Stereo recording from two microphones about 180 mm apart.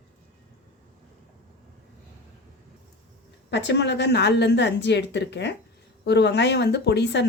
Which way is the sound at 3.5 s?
75° left (ahead or behind).